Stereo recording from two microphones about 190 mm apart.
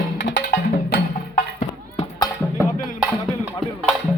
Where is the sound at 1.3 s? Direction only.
40° left (ahead or behind).